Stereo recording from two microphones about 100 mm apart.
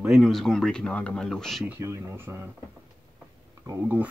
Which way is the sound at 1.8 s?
25° right (ahead or behind).